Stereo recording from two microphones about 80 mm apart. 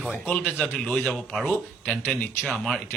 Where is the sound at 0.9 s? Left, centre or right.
Centre.